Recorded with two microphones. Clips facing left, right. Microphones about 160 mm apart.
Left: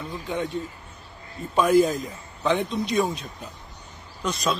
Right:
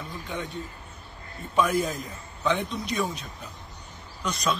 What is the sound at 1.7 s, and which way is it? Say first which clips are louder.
A man's voice: left 8 dB; centre (ahead or behind).